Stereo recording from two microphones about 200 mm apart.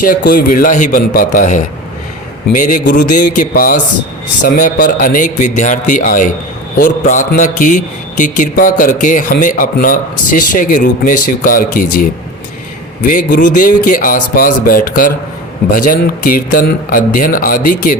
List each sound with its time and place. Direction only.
0.0 s a man's voice: 45° left (ahead or behind)